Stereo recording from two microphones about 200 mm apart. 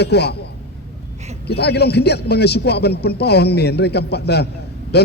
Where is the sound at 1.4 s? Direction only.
55° left (ahead or behind).